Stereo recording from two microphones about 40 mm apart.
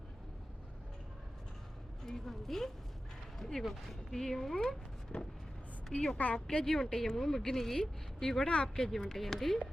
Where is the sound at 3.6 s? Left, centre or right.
Centre.